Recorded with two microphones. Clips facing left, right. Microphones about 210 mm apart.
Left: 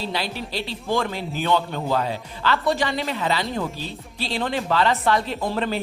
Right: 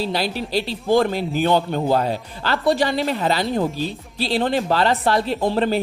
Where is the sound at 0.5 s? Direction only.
35° right (ahead or behind).